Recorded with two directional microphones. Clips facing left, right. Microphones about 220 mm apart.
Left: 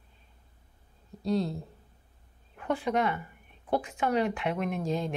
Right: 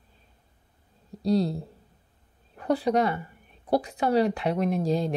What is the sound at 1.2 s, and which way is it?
A woman's voice, 35° right (ahead or behind).